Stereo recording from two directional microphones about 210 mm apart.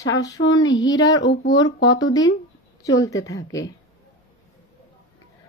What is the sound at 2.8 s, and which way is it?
Speech, 15° left (ahead or behind).